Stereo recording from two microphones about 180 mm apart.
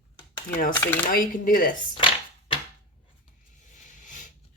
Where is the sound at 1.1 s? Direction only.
50° left (ahead or behind).